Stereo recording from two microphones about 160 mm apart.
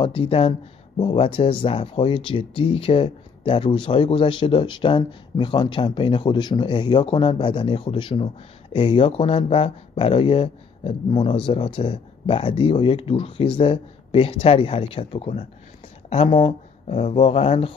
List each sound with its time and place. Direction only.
0.0 s speech: 35° left (ahead or behind)
16.4 s speech: 45° left (ahead or behind)